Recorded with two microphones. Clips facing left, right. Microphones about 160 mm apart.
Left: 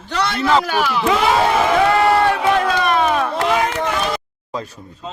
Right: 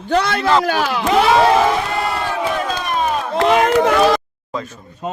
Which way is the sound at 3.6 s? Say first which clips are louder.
Right 7 dB; 55° right (ahead or behind).